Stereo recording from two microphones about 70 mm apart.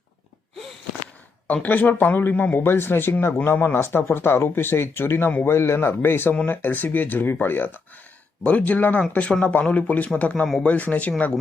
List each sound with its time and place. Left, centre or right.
1.6 s speech: left